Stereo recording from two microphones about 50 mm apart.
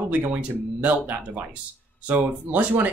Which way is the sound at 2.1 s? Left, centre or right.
Right.